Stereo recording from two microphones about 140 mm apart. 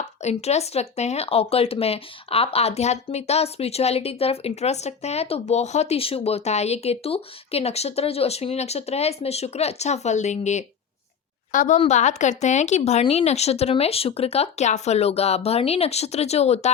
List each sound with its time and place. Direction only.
0.2 s speech: 50° left (ahead or behind)
11.5 s a woman's voice: 65° left (ahead or behind); by 16.7 s 50° left (ahead or behind)